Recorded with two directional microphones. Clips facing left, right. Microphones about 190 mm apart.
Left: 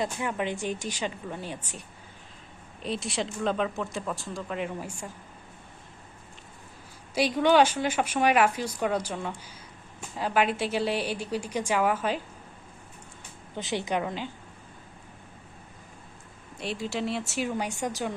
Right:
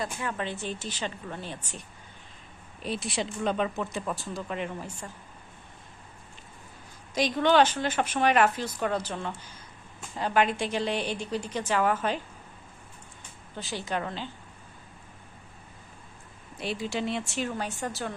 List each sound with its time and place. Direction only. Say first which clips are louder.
0.0 s a woman's voice: left 3 dB; 20° left (ahead or behind)
2.8 s speech: left 1 dB; centre (ahead or behind)
7.1 s a woman's voice: left 1 dB; 10° left (ahead or behind)
13.6 s a woman's voice: left 3 dB; 20° left (ahead or behind)
16.6 s speech: even; centre (ahead or behind)